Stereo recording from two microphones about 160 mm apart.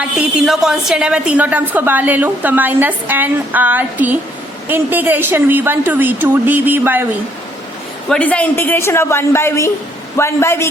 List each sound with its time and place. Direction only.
0.2 s a woman's voice: centre (ahead or behind)
8.1 s a man's voice: 10° left (ahead or behind)